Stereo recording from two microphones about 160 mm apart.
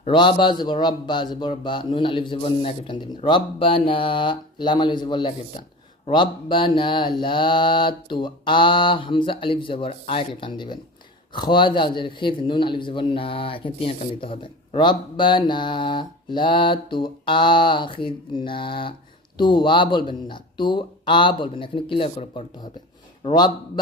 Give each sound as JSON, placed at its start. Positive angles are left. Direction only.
{"t": 0.0, "sound": "a man's voice", "side_deg": 30}